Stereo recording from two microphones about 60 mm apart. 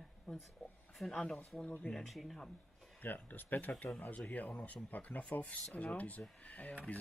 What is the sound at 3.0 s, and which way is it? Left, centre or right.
Speech, left.